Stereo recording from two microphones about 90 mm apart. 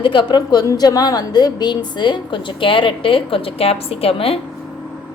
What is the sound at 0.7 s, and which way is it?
A woman's voice, 45° left (ahead or behind).